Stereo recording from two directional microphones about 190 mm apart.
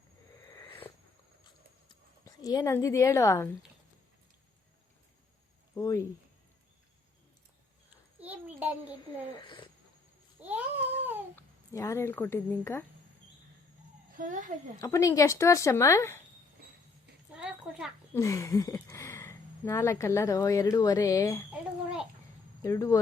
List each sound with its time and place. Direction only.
0.5 s sniff: 25° left (ahead or behind)
1.9 s speech: 20° left (ahead or behind)
5.7 s speech: 15° left (ahead or behind)
8.2 s a sound: 10° right (ahead or behind)
10.4 s babbling: 10° right (ahead or behind)
11.3 s speech: 15° left (ahead or behind)
14.1 s a child's voice: 45° right (ahead or behind)
14.8 s speech: 15° left (ahead or behind)
17.3 s a sound: 5° right (ahead or behind)
18.1 s speech: 15° left (ahead or behind)
22.6 s speech: 15° left (ahead or behind)